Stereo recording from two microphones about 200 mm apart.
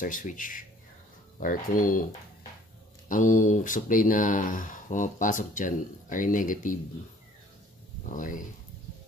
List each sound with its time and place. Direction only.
0.0 s speech: 40° left (ahead or behind)
1.8 s speech: 45° left (ahead or behind)
3.1 s speech: 40° left (ahead or behind)
8.1 s speech: 40° left (ahead or behind)